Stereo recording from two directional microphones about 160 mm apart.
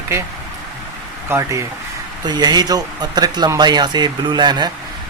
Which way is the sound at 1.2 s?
20° right (ahead or behind).